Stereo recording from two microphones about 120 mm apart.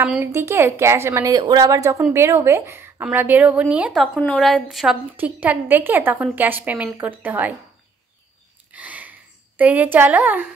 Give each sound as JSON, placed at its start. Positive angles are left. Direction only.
{"t": 0.2, "sound": "a woman's voice", "side_deg": -20}
{"t": 3.9, "sound": "a woman's voice", "side_deg": 0}
{"t": 5.1, "sound": "a woman's voice", "side_deg": -15}
{"t": 8.7, "sound": "sniff", "side_deg": -15}
{"t": 9.6, "sound": "a woman's voice", "side_deg": -15}